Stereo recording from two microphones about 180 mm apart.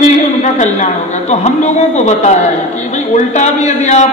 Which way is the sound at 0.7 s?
40° left (ahead or behind).